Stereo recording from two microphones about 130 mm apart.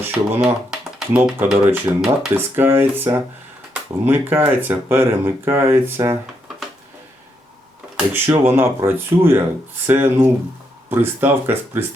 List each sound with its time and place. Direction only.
0.0 s speech: 15° right (ahead or behind)
0.7 s typing: 5° right (ahead or behind)
1.5 s speech: 10° right (ahead or behind)
7.9 s speech: 15° right (ahead or behind)